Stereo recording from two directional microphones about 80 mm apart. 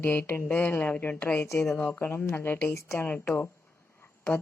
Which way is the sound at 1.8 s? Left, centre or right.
Left.